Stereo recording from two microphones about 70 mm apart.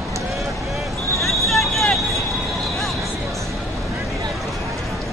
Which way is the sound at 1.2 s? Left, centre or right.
Centre.